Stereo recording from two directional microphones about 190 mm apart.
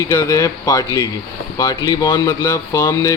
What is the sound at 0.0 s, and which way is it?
Speech, 15° left (ahead or behind).